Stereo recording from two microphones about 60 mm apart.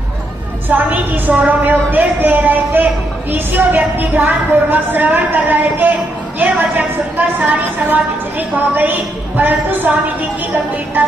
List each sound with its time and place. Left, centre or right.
0.7 s a woman's voice: right
11.0 s music: right